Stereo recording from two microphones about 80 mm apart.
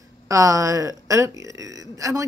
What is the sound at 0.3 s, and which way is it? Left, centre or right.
A woman's voice, right.